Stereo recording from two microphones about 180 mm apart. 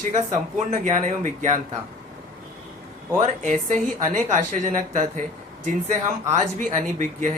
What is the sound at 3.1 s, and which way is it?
Speech, 40° right (ahead or behind).